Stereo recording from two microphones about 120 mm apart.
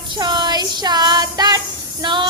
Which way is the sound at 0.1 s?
40° right (ahead or behind).